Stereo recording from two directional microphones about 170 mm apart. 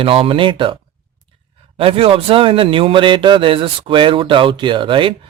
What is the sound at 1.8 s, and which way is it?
A man's voice, 35° right (ahead or behind).